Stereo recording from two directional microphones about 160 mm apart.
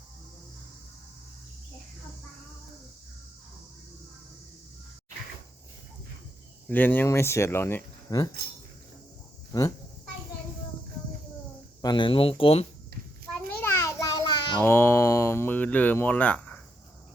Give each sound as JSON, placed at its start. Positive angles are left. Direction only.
{"t": 6.7, "sound": "speech", "side_deg": 10}
{"t": 9.5, "sound": "speech", "side_deg": 20}
{"t": 11.8, "sound": "speech", "side_deg": 30}
{"t": 13.6, "sound": "a sound", "side_deg": 15}
{"t": 14.6, "sound": "speech", "side_deg": 15}